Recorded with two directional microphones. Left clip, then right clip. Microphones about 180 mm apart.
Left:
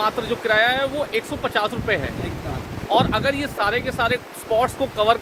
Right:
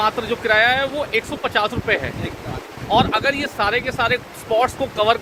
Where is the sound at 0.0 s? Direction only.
10° right (ahead or behind).